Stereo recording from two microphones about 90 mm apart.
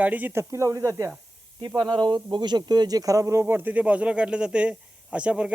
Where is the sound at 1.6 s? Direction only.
55° right (ahead or behind).